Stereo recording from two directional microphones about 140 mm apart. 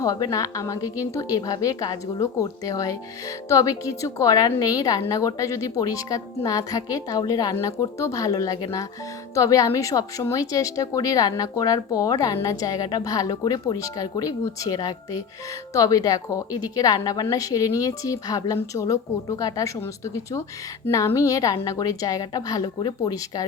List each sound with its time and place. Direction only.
0.0 s a woman's voice: 25° left (ahead or behind)